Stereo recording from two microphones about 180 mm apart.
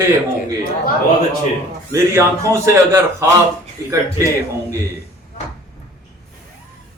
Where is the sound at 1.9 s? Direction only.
15° right (ahead or behind).